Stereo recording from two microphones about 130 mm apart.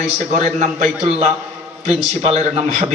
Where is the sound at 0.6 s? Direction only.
55° right (ahead or behind).